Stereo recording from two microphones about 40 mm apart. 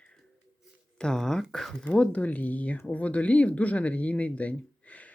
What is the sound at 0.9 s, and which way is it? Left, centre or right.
Speech, centre.